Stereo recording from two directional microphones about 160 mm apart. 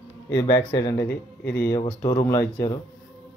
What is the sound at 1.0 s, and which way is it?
Speech, 90° left.